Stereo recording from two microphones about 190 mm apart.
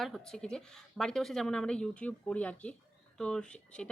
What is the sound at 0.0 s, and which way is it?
Speech, centre (ahead or behind).